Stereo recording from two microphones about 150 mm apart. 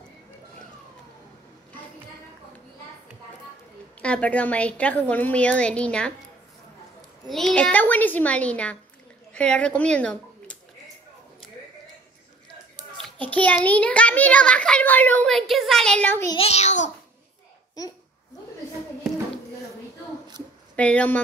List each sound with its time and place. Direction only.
4.0 s a child's voice: 10° left (ahead or behind)
7.2 s a child's voice: 5° left (ahead or behind)
12.9 s a child's voice: 10° left (ahead or behind)
16.3 s a child's voice: 45° left (ahead or behind)
20.7 s speech: 10° left (ahead or behind)